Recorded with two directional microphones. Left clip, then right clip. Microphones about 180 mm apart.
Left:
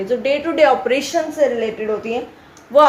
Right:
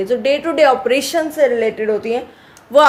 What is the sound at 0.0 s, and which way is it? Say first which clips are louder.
Speech: right 2 dB; 40° right (ahead or behind).